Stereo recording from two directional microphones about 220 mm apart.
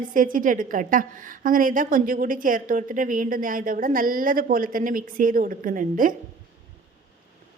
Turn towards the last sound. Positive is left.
turn(degrees=-40)  # may be behind; listen again after turning